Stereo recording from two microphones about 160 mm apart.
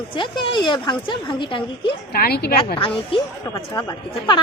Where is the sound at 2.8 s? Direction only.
35° left (ahead or behind).